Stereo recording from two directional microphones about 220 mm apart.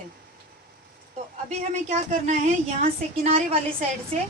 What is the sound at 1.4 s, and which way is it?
A woman's voice, 30° right (ahead or behind).